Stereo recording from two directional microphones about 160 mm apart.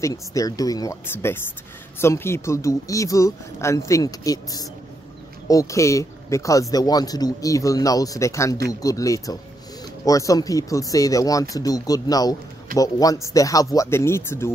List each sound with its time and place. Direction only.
0.0 s a man's voice: 20° left (ahead or behind)